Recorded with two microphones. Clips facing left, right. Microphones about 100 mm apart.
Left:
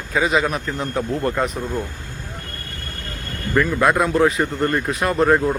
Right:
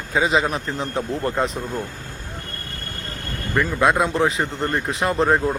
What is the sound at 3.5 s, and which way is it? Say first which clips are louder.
Speech: left 1 dB; 20° right (ahead or behind).